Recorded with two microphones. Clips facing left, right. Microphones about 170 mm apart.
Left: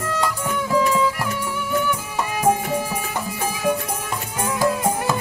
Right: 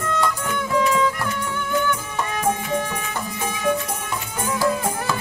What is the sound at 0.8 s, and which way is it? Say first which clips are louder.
Music: even; 5° left (ahead or behind).